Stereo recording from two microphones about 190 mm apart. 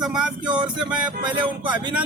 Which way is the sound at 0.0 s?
5° right (ahead or behind).